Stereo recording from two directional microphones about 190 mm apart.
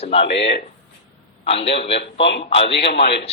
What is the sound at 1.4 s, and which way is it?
Speech, 30° left (ahead or behind).